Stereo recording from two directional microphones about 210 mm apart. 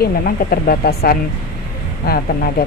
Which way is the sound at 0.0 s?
45° left (ahead or behind).